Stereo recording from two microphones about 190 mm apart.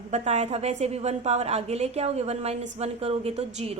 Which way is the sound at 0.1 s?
35° right (ahead or behind).